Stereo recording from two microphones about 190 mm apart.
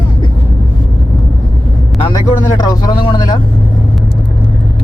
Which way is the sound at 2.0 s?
25° left (ahead or behind).